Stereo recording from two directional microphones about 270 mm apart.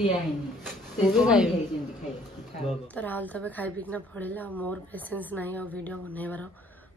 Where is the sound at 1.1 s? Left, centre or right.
Centre.